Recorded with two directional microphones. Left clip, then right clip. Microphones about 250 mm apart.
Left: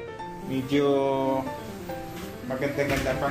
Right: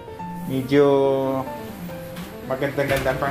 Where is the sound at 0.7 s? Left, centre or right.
Right.